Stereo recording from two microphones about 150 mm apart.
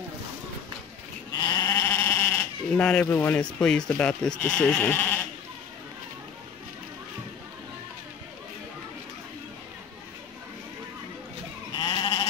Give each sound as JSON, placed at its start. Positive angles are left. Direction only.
{"t": 1.3, "sound": "sheep", "side_deg": 25}
{"t": 2.7, "sound": "speech", "side_deg": 5}
{"t": 11.7, "sound": "sheep", "side_deg": 30}